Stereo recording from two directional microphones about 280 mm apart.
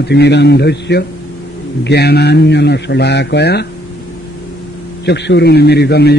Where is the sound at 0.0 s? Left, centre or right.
Left.